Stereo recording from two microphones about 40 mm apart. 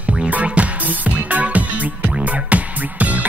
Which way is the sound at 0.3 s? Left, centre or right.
Right.